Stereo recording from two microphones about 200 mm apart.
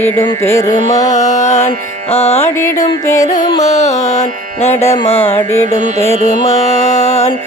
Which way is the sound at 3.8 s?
35° left (ahead or behind).